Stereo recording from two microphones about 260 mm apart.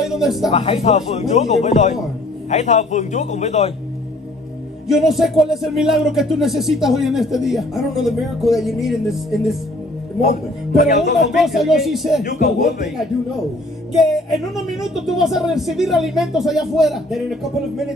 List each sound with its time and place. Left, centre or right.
0.0 s a sound: centre
0.5 s speech: left
4.8 s speech: centre
10.8 s speech: left
11.3 s speech: centre
12.2 s speech: left
13.9 s speech: centre